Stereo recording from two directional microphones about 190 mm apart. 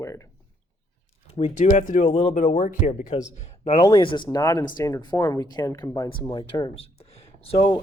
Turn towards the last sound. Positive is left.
turn(degrees=30)  # may be behind; listen again after turning